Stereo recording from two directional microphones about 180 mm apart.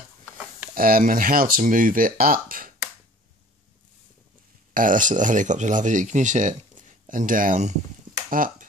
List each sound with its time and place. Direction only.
0.7 s speech: 55° right (ahead or behind)
4.7 s speech: 45° right (ahead or behind)